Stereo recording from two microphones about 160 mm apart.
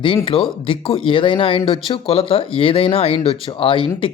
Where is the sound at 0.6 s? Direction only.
35° left (ahead or behind).